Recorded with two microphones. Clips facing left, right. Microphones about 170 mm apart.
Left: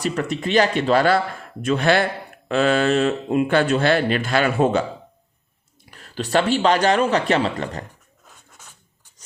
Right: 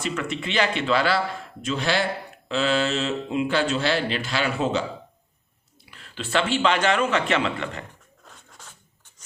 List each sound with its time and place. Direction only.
0.0 s a man's voice: 40° left (ahead or behind)
5.9 s a man's voice: 40° left (ahead or behind)
8.2 s pant: centre (ahead or behind)